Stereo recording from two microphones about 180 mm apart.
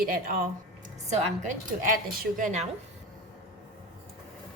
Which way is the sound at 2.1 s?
55° right (ahead or behind).